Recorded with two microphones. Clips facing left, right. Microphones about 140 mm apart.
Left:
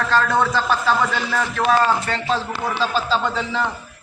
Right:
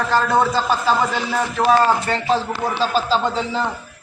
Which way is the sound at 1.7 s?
30° right (ahead or behind).